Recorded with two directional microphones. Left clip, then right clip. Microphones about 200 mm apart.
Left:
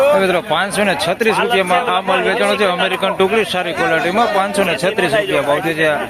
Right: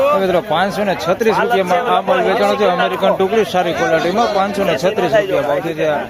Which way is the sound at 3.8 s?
50° right (ahead or behind).